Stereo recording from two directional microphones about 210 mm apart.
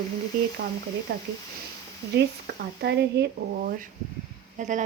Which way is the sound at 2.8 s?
50° right (ahead or behind).